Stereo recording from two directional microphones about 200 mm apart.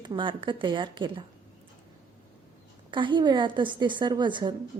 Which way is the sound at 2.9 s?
25° right (ahead or behind).